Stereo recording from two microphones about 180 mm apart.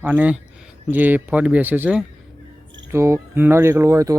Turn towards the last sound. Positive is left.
turn(degrees=-15)  # may be behind; listen again after turning